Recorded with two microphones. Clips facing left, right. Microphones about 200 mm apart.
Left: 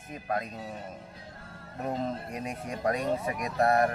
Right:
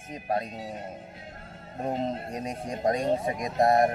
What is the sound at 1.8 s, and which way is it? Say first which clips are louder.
Speech: right 2 dB; 30° right (ahead or behind).